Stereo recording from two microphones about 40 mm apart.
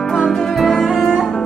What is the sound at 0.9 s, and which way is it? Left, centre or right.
Music, centre.